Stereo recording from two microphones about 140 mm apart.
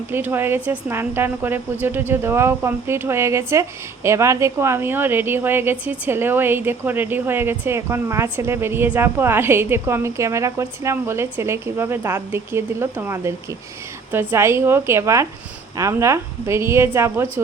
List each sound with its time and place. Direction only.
0.1 s speech: 15° right (ahead or behind)